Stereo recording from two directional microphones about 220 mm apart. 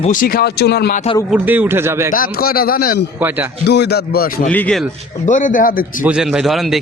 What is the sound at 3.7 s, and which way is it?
Speech, 50° left (ahead or behind).